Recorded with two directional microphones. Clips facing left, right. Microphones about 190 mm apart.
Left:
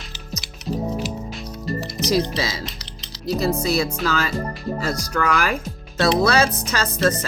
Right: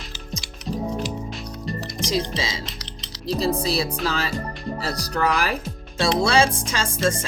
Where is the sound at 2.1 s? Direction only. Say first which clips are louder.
Left 3 dB; 20° right (ahead or behind).